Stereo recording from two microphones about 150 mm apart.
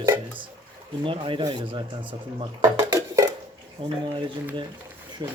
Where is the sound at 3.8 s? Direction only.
40° right (ahead or behind).